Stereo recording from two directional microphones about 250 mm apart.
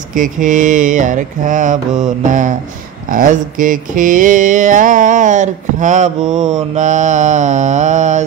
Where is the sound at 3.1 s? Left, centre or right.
Right.